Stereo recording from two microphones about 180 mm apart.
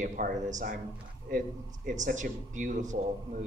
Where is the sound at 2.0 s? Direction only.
45° right (ahead or behind).